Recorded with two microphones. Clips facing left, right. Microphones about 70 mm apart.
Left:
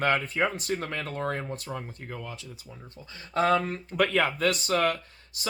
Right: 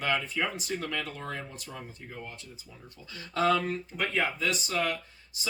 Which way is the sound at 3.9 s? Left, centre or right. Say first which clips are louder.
Left 7 dB; left.